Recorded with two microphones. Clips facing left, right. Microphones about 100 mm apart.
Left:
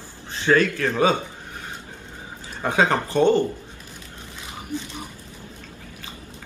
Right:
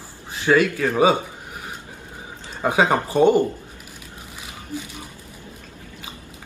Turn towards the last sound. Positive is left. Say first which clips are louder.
# left 1 dB
turn(degrees=20)  # may be behind; listen again after turning